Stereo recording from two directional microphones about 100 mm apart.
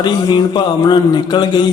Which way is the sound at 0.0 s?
50° left (ahead or behind).